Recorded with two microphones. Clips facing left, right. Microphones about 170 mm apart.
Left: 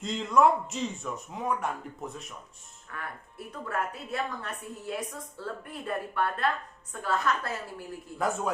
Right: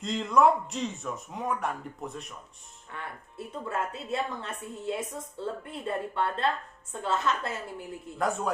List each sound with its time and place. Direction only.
0.0 s speech: centre (ahead or behind)
2.9 s a woman's voice: 25° right (ahead or behind)
8.2 s speech: centre (ahead or behind)